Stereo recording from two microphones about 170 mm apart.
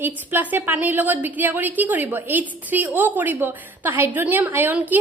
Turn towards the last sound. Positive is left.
turn(degrees=-10)  # may be behind; listen again after turning